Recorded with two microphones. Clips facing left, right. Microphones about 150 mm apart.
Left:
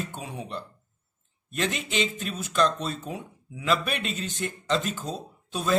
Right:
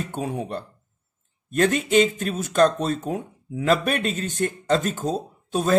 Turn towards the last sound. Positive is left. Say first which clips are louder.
# right 7 dB
turn(degrees=-50)  # may be behind; listen again after turning